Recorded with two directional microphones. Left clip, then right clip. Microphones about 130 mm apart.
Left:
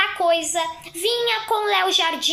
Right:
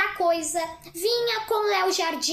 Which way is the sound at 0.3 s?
15° right (ahead or behind).